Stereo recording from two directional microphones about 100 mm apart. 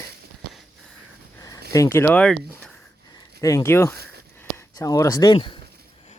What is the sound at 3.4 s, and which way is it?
Speech, 30° left (ahead or behind).